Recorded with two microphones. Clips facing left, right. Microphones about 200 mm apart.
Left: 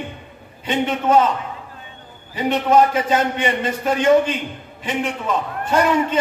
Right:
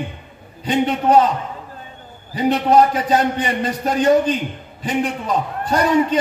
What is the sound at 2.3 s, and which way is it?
A man's voice, 35° right (ahead or behind).